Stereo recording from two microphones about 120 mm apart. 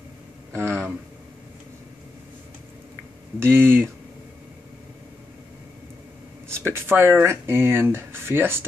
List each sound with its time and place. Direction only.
0.5 s a sound: 20° right (ahead or behind)
3.3 s speech: 20° right (ahead or behind)
6.7 s speech: 20° right (ahead or behind)